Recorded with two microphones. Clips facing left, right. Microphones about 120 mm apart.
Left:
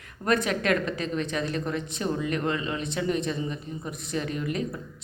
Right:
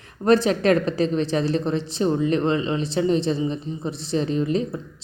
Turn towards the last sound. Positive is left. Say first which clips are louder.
# right 7 dB
turn(degrees=-30)  # may be behind; listen again after turning